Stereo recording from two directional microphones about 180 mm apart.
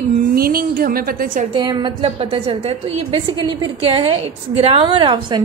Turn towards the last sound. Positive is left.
turn(degrees=-25)  # may be behind; listen again after turning